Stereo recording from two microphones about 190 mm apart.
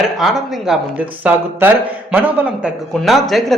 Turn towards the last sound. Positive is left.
turn(degrees=0)  # may be behind; listen again after turning